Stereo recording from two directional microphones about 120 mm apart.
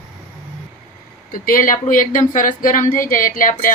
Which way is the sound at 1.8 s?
90° left.